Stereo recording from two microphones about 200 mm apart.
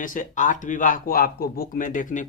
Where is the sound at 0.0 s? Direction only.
40° left (ahead or behind).